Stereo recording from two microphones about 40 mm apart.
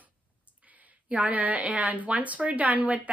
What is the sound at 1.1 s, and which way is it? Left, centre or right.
A woman's voice, right.